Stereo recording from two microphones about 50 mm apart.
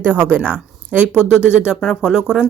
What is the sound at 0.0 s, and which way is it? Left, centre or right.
Speech, right.